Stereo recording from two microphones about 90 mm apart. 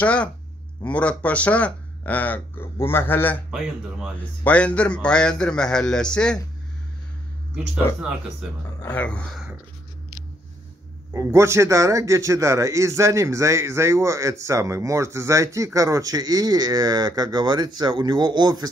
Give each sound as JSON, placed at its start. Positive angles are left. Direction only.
{"t": 0.0, "sound": "speech", "side_deg": 15}
{"t": 4.5, "sound": "speech", "side_deg": 15}
{"t": 8.8, "sound": "speech", "side_deg": 15}
{"t": 11.1, "sound": "a man's voice", "side_deg": -30}